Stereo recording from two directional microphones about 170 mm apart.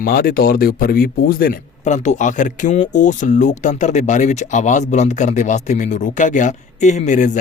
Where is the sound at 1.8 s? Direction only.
45° left (ahead or behind).